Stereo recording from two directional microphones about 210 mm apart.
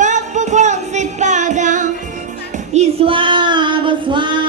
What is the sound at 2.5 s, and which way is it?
Female singing, 30° right (ahead or behind).